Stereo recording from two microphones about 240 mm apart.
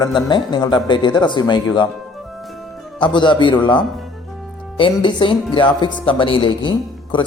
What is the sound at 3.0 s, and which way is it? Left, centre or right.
Speech, centre.